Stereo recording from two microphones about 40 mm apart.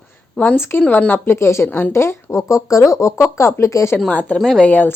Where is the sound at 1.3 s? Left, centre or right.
Left.